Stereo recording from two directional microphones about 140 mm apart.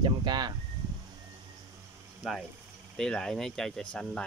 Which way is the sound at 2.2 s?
Centre (ahead or behind).